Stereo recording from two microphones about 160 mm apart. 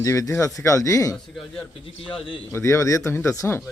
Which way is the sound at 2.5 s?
20° left (ahead or behind).